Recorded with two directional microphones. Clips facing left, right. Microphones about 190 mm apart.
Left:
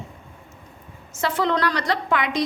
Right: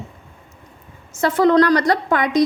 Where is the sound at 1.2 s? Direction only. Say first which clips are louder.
Right 8 dB; 45° right (ahead or behind).